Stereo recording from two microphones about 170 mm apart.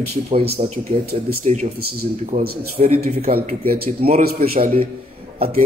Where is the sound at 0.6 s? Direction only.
40° right (ahead or behind).